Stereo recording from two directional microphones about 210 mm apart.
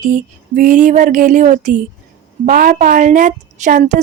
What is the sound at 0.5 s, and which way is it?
A woman's voice, 40° right (ahead or behind).